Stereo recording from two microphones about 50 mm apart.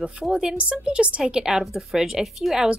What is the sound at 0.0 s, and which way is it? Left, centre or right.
A woman's voice, centre.